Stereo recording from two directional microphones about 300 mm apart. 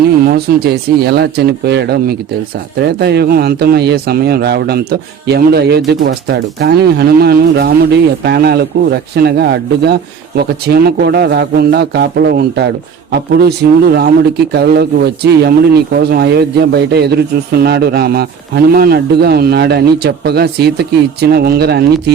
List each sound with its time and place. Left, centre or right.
0.3 s speech: right